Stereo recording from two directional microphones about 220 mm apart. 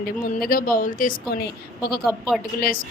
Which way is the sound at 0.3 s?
40° left (ahead or behind).